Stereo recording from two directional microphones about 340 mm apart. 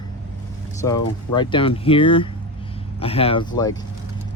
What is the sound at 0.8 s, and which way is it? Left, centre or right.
Speech, centre.